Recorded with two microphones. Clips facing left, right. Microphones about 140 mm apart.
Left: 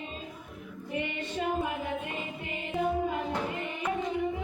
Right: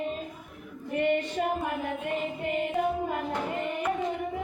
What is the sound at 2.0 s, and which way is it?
Music, 55° right (ahead or behind).